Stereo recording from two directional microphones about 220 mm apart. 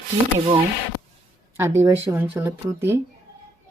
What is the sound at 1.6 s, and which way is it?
Speech, 10° right (ahead or behind).